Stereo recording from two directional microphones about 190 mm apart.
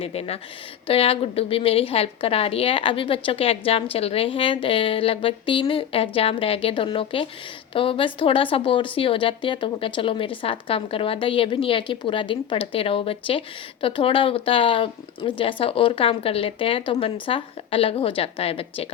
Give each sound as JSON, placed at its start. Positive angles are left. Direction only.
{"t": 0.0, "sound": "a woman's voice", "side_deg": 30}